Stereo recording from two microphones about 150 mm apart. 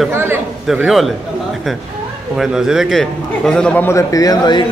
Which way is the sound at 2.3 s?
5° right (ahead or behind).